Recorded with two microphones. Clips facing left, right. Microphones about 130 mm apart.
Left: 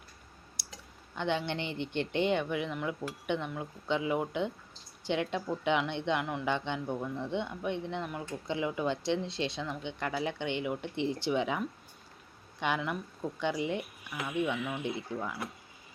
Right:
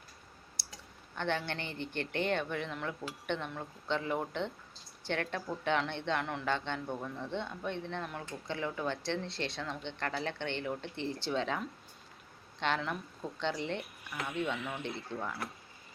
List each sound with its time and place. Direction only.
0.7 s clicking: 15° left (ahead or behind)
1.4 s a woman's voice: 20° left (ahead or behind)
6.2 s speech: 5° left (ahead or behind)
6.5 s a woman's voice: 15° left (ahead or behind)